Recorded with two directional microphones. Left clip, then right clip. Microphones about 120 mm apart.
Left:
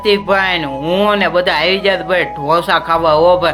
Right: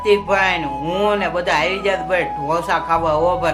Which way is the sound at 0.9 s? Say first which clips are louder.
Left 6 dB; 30° left (ahead or behind).